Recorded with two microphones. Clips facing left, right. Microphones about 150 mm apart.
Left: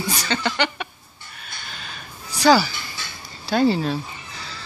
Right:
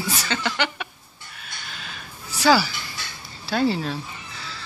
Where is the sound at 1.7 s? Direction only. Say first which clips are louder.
Left 1 dB; centre (ahead or behind).